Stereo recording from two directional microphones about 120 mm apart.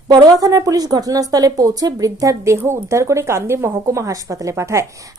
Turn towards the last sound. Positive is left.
turn(degrees=-25)  # may be behind; listen again after turning